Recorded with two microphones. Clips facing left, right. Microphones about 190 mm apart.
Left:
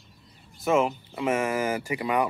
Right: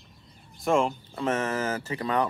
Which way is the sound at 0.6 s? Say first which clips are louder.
Left 1 dB; 5° left (ahead or behind).